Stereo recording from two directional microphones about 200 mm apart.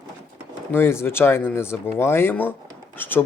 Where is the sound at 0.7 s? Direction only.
10° left (ahead or behind).